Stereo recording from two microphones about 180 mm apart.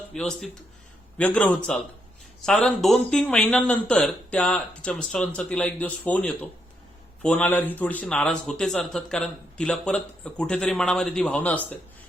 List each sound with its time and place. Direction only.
0.1 s a man's voice: 5° left (ahead or behind)